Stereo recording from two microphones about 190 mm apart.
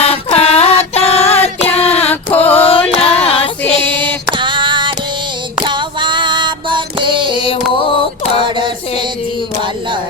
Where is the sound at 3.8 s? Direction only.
25° right (ahead or behind).